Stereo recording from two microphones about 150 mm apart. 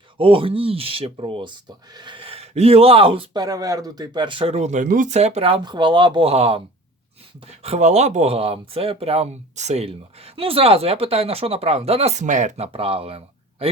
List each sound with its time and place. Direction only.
0.2 s speech: 35° right (ahead or behind)
3.4 s speech: 25° right (ahead or behind); by 5.5 s 45° right (ahead or behind)
5.6 s speech: 30° right (ahead or behind)